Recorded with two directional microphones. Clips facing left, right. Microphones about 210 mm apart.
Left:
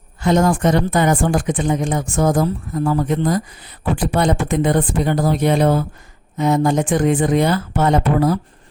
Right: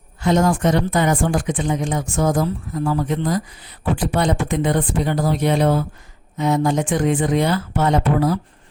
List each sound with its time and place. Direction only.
0.2 s speech: 50° left (ahead or behind)